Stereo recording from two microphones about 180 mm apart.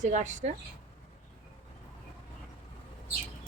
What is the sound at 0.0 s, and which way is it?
Speech, 40° right (ahead or behind).